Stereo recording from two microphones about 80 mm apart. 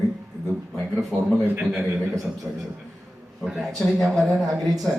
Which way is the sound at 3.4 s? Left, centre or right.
Centre.